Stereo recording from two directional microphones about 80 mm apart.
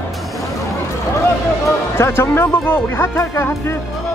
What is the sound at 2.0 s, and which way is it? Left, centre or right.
Speech, left.